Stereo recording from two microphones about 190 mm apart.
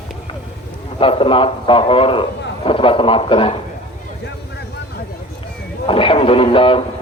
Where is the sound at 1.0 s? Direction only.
30° left (ahead or behind).